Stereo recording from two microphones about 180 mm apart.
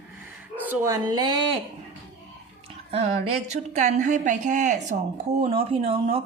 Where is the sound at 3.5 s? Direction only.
40° right (ahead or behind).